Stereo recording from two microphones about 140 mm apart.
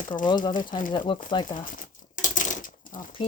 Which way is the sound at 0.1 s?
25° left (ahead or behind).